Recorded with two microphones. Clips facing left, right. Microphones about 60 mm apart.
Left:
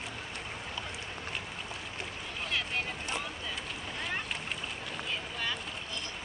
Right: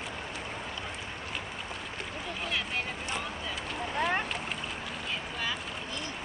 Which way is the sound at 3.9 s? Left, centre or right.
Right.